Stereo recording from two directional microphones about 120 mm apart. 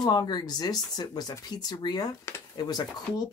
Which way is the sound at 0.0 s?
35° left (ahead or behind).